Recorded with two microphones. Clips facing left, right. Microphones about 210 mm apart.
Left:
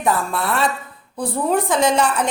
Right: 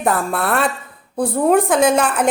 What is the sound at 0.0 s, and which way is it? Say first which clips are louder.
A woman's voice: right 2 dB; 55° right (ahead or behind).